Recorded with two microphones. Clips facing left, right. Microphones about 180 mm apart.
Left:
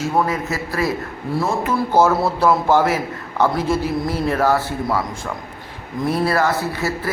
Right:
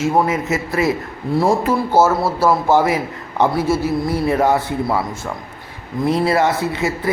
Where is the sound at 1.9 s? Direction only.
5° right (ahead or behind).